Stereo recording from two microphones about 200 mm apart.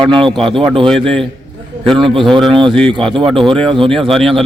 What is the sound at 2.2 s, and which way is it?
A man's voice, centre (ahead or behind).